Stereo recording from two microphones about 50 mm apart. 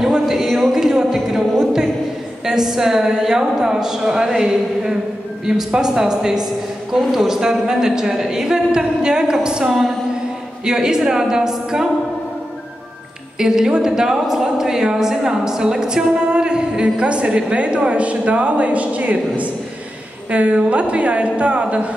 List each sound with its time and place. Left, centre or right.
0.4 s a sound: centre
2.4 s speech: centre
9.7 s music: centre
10.6 s speech: centre
13.4 s a woman's voice: centre